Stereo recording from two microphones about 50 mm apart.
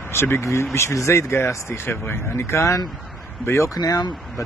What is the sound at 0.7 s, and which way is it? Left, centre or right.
Speech, left.